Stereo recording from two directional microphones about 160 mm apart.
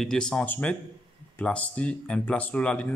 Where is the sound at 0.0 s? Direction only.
5° left (ahead or behind).